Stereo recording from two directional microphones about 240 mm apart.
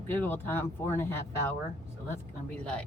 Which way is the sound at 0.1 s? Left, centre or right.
Centre.